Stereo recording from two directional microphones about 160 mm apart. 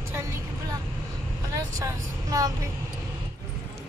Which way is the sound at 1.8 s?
20° right (ahead or behind).